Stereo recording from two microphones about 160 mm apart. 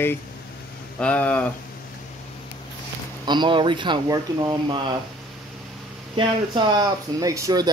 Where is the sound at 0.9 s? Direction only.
10° left (ahead or behind).